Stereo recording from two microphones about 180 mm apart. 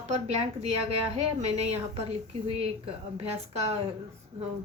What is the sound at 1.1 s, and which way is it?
A woman's voice, 35° right (ahead or behind).